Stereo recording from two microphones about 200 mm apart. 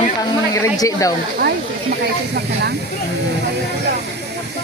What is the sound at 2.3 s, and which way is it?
Speech, 55° right (ahead or behind).